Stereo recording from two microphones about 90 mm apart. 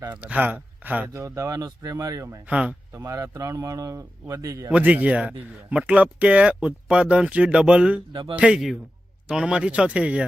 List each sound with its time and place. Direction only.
0.1 s speech: 15° right (ahead or behind)
1.1 s a man's voice: 35° right (ahead or behind)
2.5 s speech: 15° right (ahead or behind)
2.9 s a man's voice: 30° right (ahead or behind)
4.7 s speech: 15° right (ahead or behind)